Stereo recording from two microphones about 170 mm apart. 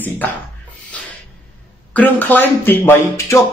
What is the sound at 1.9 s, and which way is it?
Speech, 10° left (ahead or behind).